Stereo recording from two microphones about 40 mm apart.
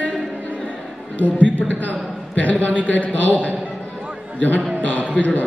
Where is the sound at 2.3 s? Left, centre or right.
Left.